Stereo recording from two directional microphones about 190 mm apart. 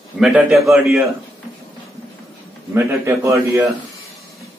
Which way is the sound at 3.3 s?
15° right (ahead or behind).